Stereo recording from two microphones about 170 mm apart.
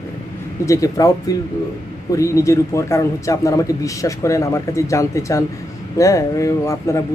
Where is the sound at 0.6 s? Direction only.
20° left (ahead or behind).